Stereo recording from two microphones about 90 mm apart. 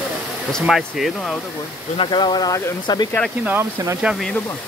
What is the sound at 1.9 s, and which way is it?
Speech, 65° left (ahead or behind).